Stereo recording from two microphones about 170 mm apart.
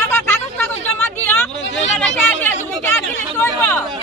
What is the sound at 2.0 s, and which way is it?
Speech, 10° left (ahead or behind).